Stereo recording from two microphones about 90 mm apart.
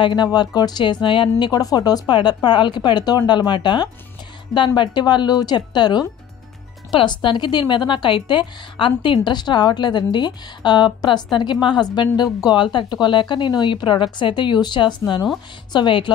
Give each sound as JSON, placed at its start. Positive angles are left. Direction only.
{"t": 0.0, "sound": "a woman's voice", "side_deg": 55}
{"t": 1.0, "sound": "a woman's voice", "side_deg": 65}
{"t": 1.5, "sound": "a woman's voice", "side_deg": 45}
{"t": 2.1, "sound": "a woman's voice", "side_deg": 60}